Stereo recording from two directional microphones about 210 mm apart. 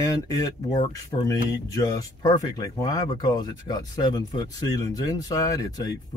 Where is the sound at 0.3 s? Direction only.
15° left (ahead or behind).